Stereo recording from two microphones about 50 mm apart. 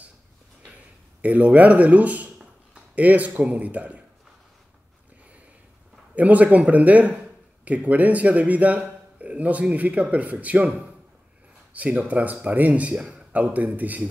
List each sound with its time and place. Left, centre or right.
1.2 s a man's voice: right
6.1 s speech: right
11.7 s speech: right